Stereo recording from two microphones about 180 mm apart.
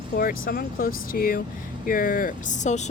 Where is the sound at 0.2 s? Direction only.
55° left (ahead or behind).